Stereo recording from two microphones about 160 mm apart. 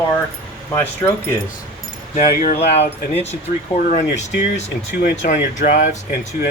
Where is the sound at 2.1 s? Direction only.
60° left (ahead or behind).